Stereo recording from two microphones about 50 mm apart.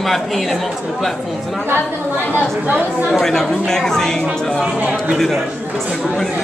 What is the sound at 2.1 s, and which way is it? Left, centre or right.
Speech, left.